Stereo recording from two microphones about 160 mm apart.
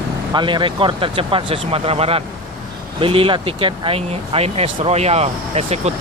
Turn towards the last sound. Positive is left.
turn(degrees=-40)  # may be behind; listen again after turning